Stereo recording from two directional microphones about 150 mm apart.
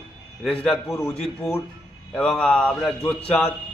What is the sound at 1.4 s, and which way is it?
A man's voice, 5° left (ahead or behind).